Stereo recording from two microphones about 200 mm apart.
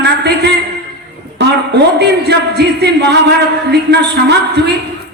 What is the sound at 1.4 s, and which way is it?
A man's voice, 55° right (ahead or behind).